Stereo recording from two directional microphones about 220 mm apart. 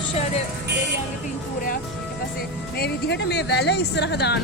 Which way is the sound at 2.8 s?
50° left (ahead or behind).